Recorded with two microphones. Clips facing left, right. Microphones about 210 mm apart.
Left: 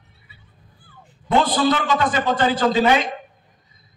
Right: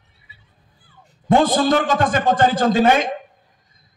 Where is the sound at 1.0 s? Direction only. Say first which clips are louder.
Right 3 dB; 45° right (ahead or behind).